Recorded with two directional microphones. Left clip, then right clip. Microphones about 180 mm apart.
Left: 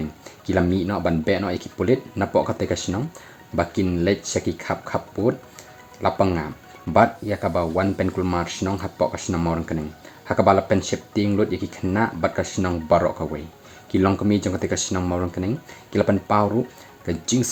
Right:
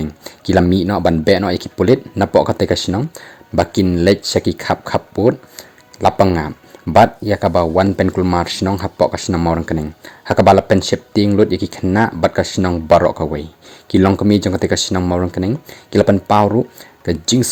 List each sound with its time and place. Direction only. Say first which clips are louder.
0.0 s speech: right 7 dB; 45° right (ahead or behind)